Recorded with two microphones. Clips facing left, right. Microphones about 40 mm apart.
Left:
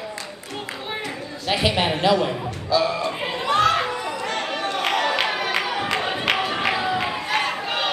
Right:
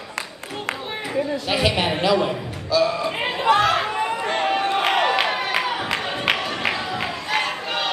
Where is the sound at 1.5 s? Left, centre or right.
Centre.